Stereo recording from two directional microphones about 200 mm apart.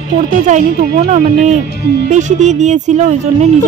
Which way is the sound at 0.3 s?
40° right (ahead or behind).